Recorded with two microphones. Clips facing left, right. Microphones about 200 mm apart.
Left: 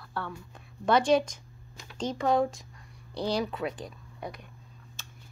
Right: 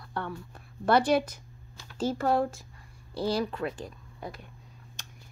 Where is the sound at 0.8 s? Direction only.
10° right (ahead or behind).